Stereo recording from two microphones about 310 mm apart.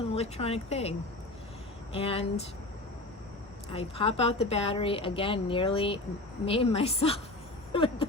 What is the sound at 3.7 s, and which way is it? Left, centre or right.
Speech, centre.